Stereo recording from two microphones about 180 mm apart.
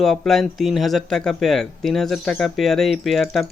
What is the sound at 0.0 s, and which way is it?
Speech, centre (ahead or behind).